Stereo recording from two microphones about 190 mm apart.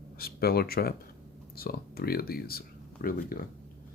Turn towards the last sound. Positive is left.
turn(degrees=50)  # may be behind; listen again after turning